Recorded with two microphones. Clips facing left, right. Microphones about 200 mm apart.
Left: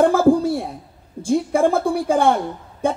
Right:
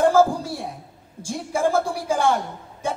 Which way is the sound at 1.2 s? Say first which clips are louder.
Left 6 dB; 60° left (ahead or behind).